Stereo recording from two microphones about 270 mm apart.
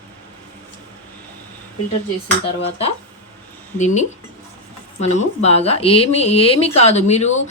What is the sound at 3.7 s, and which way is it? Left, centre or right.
Speech, left.